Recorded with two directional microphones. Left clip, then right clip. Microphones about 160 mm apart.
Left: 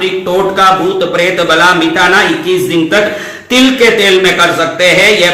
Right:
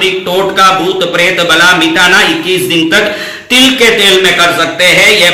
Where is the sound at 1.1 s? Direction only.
15° left (ahead or behind).